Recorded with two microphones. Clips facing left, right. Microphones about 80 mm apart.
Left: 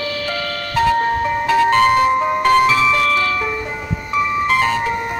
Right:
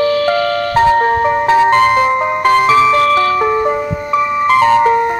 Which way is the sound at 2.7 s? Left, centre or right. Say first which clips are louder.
Right 6 dB; right.